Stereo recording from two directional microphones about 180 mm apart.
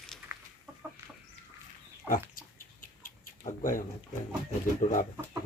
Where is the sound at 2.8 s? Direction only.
50° left (ahead or behind).